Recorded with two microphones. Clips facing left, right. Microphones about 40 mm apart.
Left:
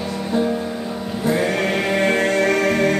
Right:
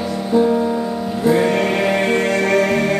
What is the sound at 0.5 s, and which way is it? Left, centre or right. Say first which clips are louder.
Music: right 6 dB; right.